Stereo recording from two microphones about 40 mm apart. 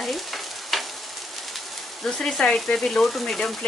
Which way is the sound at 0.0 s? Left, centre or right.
Centre.